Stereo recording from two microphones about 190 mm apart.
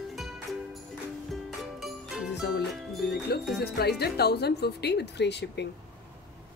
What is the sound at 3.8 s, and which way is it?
Speech, 60° left (ahead or behind).